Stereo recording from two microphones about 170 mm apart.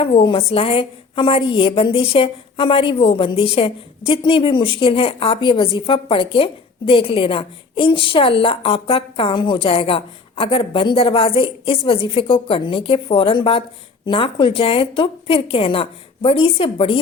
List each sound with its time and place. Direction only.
0.0 s a woman's voice: 30° left (ahead or behind)